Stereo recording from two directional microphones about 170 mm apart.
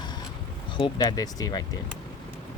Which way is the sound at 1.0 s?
20° left (ahead or behind).